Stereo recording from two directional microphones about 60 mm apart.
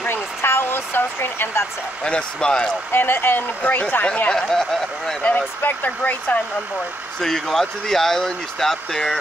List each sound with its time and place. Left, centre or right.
0.0 s a sound: left
2.0 s speech: centre
2.9 s speech: left
4.0 s speech: centre
5.3 s speech: left
7.2 s speech: centre